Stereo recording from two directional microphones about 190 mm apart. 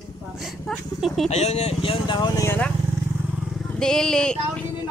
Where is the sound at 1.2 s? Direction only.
35° left (ahead or behind); by 2.7 s 10° left (ahead or behind).